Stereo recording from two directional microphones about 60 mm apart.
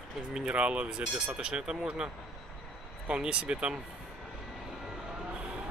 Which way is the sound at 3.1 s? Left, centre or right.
Centre.